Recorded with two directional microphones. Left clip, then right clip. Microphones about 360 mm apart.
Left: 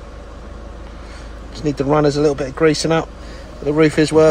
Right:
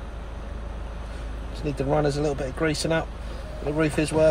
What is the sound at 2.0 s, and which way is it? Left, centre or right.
Speech, left.